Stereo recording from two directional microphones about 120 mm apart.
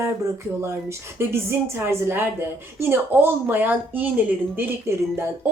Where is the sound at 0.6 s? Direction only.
20° right (ahead or behind).